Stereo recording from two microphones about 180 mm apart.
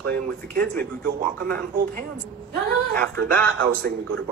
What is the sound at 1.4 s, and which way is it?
Speech, 55° right (ahead or behind).